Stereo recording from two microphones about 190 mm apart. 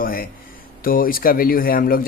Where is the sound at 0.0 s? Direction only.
50° left (ahead or behind).